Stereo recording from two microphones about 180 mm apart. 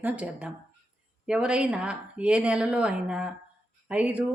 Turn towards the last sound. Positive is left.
turn(degrees=-10)  # may be behind; listen again after turning